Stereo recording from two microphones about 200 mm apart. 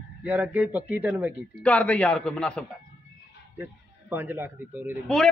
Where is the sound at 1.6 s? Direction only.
5° left (ahead or behind).